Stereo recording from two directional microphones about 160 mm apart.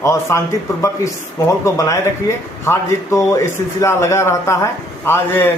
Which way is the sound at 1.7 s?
20° left (ahead or behind).